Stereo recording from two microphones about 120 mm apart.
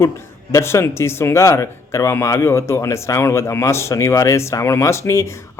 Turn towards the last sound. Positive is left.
turn(degrees=25)  # may be behind; listen again after turning